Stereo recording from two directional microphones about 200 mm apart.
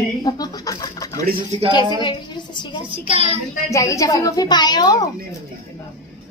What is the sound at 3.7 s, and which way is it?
A woman's voice, 15° left (ahead or behind).